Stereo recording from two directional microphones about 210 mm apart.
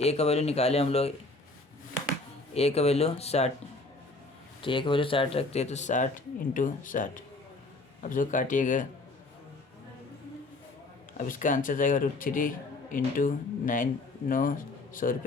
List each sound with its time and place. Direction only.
0.0 s speech: 30° left (ahead or behind)
2.5 s speech: 30° left (ahead or behind)
4.6 s speech: 25° left (ahead or behind)
11.2 s speech: 40° left (ahead or behind)